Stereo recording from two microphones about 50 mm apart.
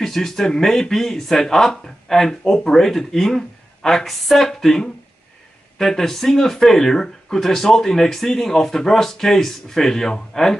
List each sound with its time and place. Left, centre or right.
0.0 s speech: centre